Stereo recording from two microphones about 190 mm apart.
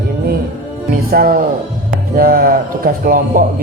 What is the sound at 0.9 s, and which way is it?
Speech, 50° right (ahead or behind).